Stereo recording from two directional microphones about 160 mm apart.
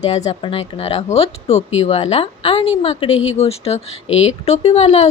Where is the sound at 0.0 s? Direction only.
45° left (ahead or behind).